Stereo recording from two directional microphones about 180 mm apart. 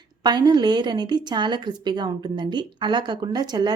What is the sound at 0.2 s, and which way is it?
A woman's voice, 25° right (ahead or behind).